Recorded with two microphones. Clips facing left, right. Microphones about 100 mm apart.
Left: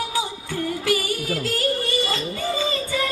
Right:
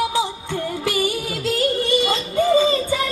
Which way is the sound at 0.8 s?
25° right (ahead or behind).